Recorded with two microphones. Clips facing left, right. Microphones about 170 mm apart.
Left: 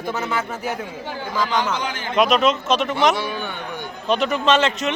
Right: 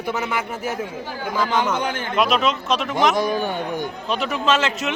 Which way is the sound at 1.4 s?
55° right (ahead or behind).